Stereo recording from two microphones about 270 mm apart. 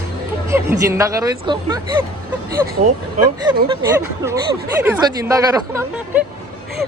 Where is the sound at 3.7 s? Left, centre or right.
Centre.